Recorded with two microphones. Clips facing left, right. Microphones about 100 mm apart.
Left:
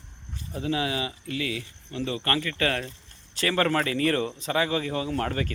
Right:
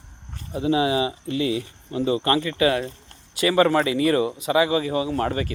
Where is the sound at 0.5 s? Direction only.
20° right (ahead or behind).